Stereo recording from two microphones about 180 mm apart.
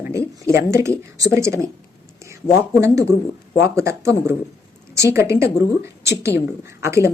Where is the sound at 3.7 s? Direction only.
15° right (ahead or behind).